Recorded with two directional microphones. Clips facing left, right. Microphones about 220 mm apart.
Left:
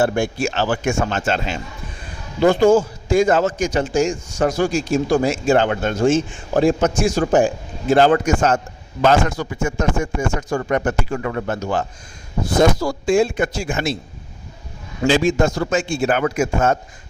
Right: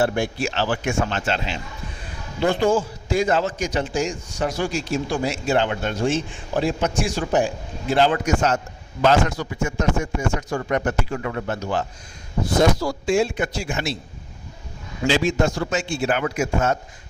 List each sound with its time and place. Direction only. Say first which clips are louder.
0.0 s a man's voice: left 3 dB; 45° left (ahead or behind)
15.0 s a man's voice: left 4 dB; 50° left (ahead or behind)